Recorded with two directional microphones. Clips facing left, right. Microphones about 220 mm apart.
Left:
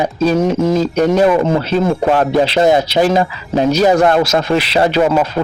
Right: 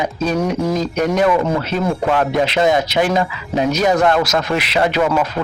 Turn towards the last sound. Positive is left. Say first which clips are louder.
# left 4 dB
turn(degrees=30)  # may be behind; listen again after turning